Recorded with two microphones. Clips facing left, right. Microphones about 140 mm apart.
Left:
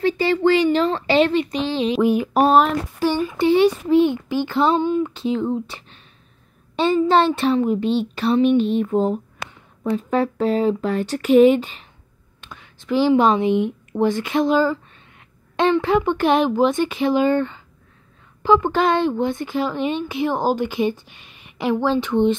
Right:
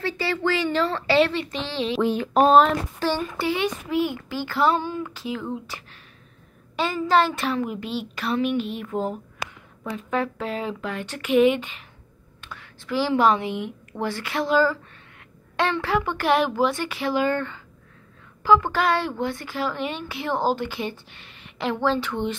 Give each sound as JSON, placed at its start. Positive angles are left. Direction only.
{"t": 0.0, "sound": "speech", "side_deg": 20}
{"t": 3.3, "sound": "speech", "side_deg": 30}
{"t": 9.4, "sound": "a sound", "side_deg": -5}
{"t": 9.8, "sound": "speech", "side_deg": 35}
{"t": 12.4, "sound": "speech", "side_deg": 20}